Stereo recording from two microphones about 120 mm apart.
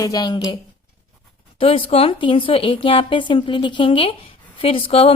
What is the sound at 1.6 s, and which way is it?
A woman's voice, 50° left (ahead or behind).